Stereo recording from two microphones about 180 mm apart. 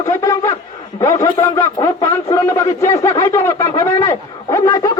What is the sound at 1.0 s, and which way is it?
A man's voice, 20° left (ahead or behind).